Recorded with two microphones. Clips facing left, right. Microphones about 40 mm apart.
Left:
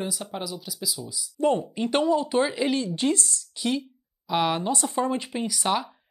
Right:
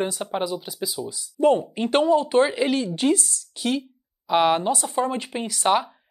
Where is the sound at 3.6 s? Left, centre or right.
Right.